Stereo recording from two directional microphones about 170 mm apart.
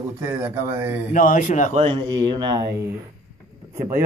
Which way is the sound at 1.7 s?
35° right (ahead or behind).